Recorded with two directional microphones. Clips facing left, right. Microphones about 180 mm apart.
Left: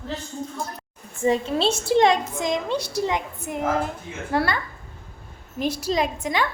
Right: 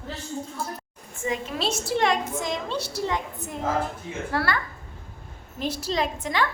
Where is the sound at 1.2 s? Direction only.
30° left (ahead or behind); by 6.5 s 15° left (ahead or behind).